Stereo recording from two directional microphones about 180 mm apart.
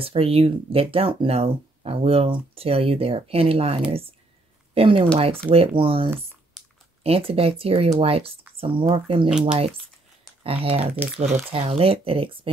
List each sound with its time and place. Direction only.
0.0 s speech: 30° right (ahead or behind)
6.6 s a sound: 5° right (ahead or behind)
7.0 s speech: 35° right (ahead or behind)
10.4 s speech: 30° right (ahead or behind)